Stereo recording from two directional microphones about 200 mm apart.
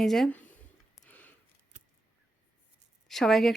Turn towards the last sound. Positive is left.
turn(degrees=0)  # may be behind; listen again after turning